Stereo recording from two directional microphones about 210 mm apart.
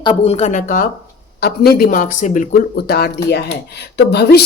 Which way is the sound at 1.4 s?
50° left (ahead or behind).